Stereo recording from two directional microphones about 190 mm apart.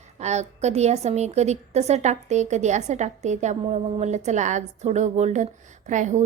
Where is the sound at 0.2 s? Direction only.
35° right (ahead or behind).